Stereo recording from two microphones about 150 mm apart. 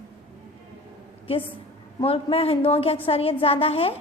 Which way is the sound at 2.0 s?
40° left (ahead or behind).